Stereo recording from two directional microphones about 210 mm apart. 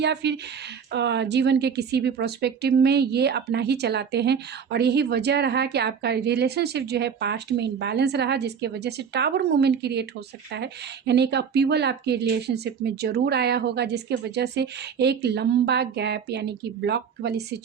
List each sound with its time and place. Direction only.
0.0 s a woman's voice: 55° right (ahead or behind)